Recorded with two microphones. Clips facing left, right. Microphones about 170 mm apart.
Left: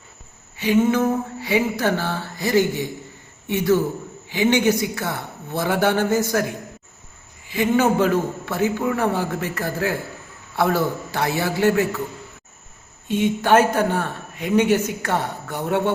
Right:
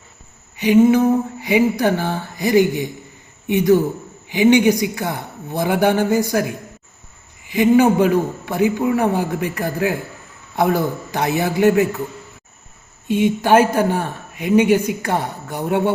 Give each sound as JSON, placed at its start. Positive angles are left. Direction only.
{"t": 0.5, "sound": "a man's voice", "side_deg": -15}
{"t": 7.4, "sound": "a man's voice", "side_deg": -15}
{"t": 13.1, "sound": "a man's voice", "side_deg": -10}